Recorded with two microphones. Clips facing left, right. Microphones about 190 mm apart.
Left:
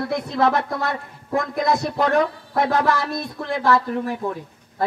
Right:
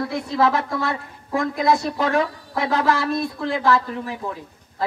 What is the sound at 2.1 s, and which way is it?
Speech, 55° left (ahead or behind).